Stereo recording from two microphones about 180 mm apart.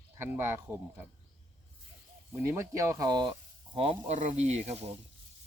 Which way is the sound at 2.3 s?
15° right (ahead or behind).